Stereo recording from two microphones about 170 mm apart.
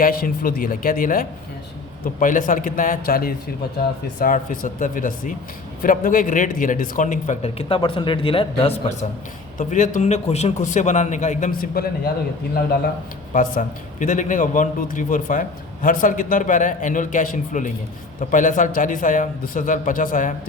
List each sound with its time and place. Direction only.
0.0 s a man's voice: 55° left (ahead or behind)
7.7 s a man's voice: 30° left (ahead or behind); by 12.1 s 60° left (ahead or behind)
13.3 s a man's voice: 50° left (ahead or behind)